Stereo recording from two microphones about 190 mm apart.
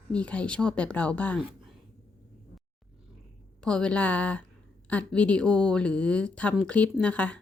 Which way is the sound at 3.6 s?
5° left (ahead or behind).